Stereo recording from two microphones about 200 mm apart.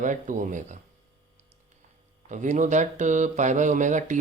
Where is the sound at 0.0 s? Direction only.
40° right (ahead or behind).